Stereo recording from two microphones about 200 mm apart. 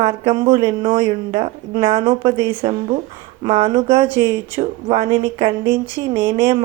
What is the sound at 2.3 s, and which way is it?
Speech, 15° right (ahead or behind).